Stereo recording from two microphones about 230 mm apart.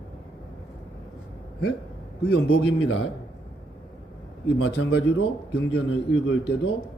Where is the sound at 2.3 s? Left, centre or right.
Left.